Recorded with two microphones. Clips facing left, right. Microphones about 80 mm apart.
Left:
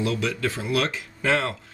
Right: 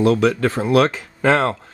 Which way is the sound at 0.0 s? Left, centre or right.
Right.